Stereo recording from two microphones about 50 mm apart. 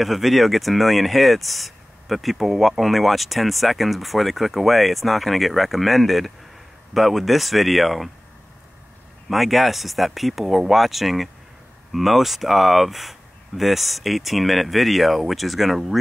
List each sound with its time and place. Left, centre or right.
0.0 s speech: centre
9.3 s speech: centre